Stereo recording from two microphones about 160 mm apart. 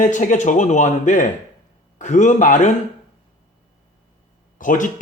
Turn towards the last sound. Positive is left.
turn(degrees=55)  # may be behind; listen again after turning